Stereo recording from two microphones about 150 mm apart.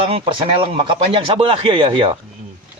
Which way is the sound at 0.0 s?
35° right (ahead or behind).